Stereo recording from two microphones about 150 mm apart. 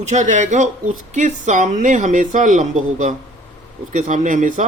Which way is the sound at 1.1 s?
55° right (ahead or behind).